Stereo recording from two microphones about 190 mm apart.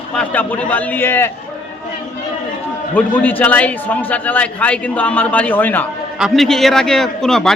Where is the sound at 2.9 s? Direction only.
10° left (ahead or behind).